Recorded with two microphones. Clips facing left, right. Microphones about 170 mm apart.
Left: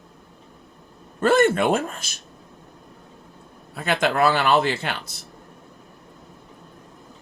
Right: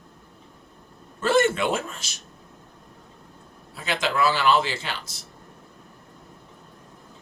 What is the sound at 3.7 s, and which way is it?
Speech, 55° left (ahead or behind).